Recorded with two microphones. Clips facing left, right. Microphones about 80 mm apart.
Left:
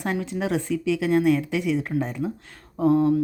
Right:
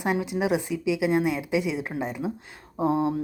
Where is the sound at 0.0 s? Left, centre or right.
Centre.